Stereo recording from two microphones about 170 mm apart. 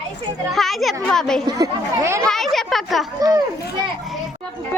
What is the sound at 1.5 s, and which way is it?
Speech, 20° right (ahead or behind).